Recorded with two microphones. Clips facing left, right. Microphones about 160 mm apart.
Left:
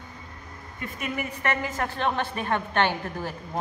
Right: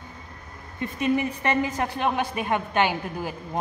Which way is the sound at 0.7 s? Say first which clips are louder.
Right 8 dB; 25° right (ahead or behind).